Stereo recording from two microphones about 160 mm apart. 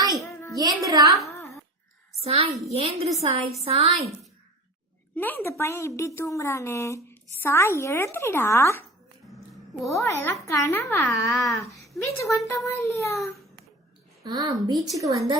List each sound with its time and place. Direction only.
0.6 s a woman's voice: 25° right (ahead or behind)
2.2 s a woman's voice: 35° right (ahead or behind)
5.1 s a woman's voice: 15° left (ahead or behind)
9.9 s a woman's voice: 20° left (ahead or behind)
11.3 s speech: centre (ahead or behind)
11.6 s a woman's voice: 20° left (ahead or behind)
14.3 s a woman's voice: 25° right (ahead or behind)